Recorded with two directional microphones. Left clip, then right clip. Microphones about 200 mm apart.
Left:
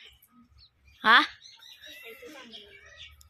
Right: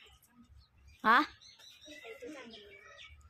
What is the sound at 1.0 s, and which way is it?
Speech, centre (ahead or behind).